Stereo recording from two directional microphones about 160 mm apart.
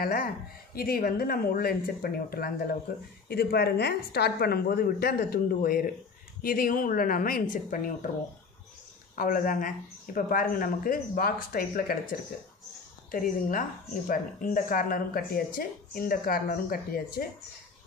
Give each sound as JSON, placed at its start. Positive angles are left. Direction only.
{"t": 0.0, "sound": "a woman's voice", "side_deg": 65}
{"t": 3.3, "sound": "a woman's voice", "side_deg": 80}
{"t": 9.1, "sound": "a woman's voice", "side_deg": 60}
{"t": 13.1, "sound": "a woman's voice", "side_deg": 60}